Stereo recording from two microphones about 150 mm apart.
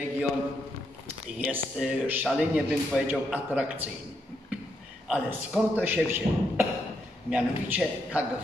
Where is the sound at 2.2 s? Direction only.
Centre (ahead or behind).